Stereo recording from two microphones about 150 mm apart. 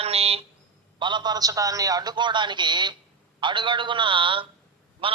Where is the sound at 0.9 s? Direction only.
30° right (ahead or behind).